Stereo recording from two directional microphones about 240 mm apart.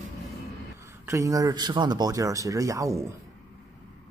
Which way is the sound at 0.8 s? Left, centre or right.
Centre.